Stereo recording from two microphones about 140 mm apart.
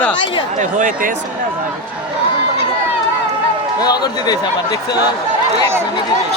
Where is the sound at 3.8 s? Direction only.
30° left (ahead or behind).